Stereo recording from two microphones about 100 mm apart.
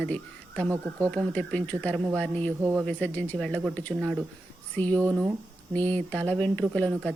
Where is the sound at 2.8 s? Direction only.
15° left (ahead or behind).